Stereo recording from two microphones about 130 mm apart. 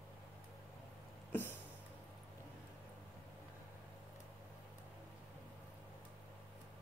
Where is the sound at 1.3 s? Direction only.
15° left (ahead or behind).